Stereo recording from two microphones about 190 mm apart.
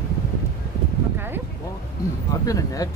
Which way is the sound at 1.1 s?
10° right (ahead or behind).